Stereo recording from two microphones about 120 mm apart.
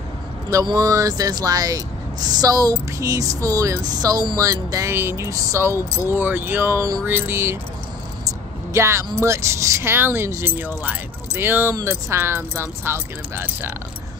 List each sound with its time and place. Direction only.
0.7 s speech: 30° right (ahead or behind)
8.7 s speech: 25° right (ahead or behind)